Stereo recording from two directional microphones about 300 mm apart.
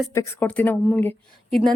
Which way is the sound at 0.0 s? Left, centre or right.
Centre.